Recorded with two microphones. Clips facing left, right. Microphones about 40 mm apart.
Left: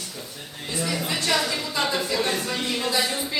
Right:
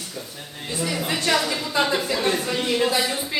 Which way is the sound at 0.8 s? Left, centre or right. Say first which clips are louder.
Right 2 dB; centre.